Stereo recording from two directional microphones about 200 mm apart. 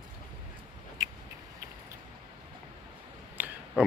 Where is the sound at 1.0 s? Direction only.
20° right (ahead or behind).